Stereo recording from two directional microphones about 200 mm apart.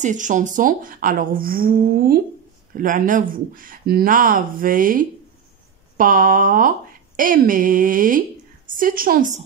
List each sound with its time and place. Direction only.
0.0 s speech: 40° right (ahead or behind)